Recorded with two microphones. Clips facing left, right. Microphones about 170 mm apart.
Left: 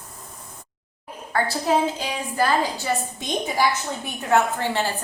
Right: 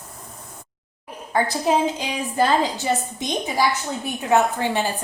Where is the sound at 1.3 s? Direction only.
20° right (ahead or behind).